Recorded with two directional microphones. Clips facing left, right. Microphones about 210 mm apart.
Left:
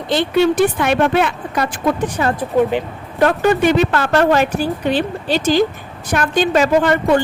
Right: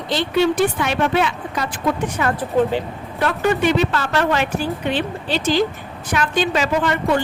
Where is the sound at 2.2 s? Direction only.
35° left (ahead or behind).